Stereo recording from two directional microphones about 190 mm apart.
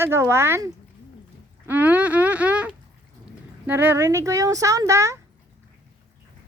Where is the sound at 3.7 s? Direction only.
10° right (ahead or behind).